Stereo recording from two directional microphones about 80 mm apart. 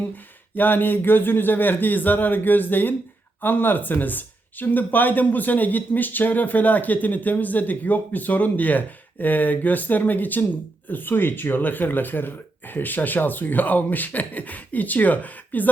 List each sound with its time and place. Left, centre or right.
0.5 s speech: left